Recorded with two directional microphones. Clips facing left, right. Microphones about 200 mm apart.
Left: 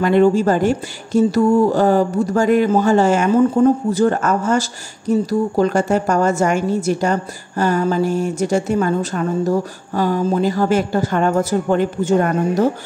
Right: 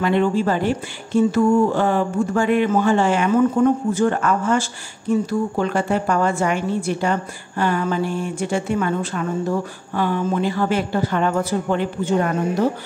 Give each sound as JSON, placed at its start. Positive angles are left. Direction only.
{"t": 0.0, "sound": "speech", "side_deg": 45}